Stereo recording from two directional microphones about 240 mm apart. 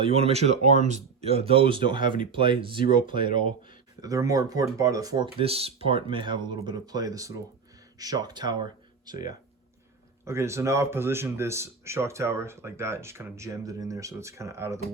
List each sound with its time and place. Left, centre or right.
0.0 s speech: right